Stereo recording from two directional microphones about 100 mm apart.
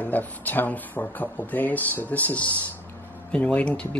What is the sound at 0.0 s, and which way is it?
Speech, 15° left (ahead or behind).